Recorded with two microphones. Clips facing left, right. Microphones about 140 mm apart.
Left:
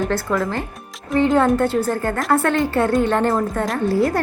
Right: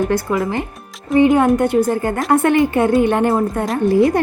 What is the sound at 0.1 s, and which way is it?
A woman's voice, 10° right (ahead or behind).